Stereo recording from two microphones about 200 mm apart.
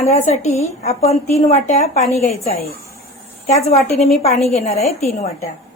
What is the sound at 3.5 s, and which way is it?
A woman's voice, 30° left (ahead or behind).